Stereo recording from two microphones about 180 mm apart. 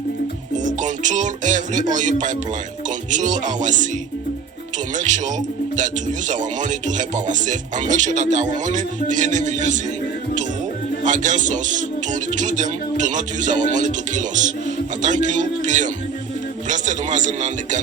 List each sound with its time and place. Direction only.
0.5 s music: 45° right (ahead or behind)
3.1 s speech: 45° right (ahead or behind)
4.9 s speech: 45° right (ahead or behind)
11.0 s speech: 45° right (ahead or behind)